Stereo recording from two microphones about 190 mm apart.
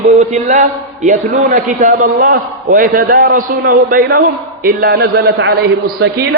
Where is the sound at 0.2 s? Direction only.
40° right (ahead or behind).